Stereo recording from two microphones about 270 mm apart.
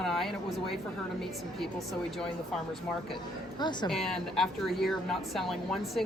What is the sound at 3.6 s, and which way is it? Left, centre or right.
Speech, centre.